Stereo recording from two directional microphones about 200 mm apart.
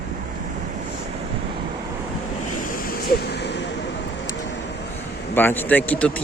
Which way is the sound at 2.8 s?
50° left (ahead or behind).